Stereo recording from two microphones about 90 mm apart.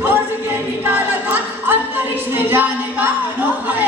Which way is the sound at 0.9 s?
25° right (ahead or behind).